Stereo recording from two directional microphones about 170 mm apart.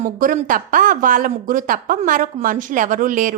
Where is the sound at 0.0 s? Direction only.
55° right (ahead or behind).